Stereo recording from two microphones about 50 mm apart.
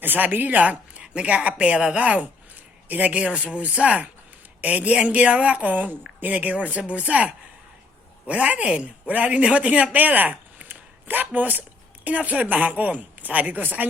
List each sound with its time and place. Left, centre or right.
0.0 s a woman's voice: right